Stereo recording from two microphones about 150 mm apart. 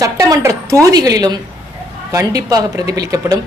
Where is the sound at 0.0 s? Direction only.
20° right (ahead or behind).